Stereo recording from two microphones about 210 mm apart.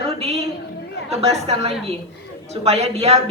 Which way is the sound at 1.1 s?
30° right (ahead or behind).